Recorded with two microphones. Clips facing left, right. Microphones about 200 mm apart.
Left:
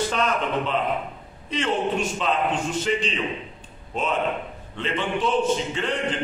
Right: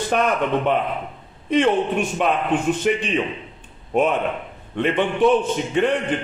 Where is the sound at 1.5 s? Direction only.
55° right (ahead or behind).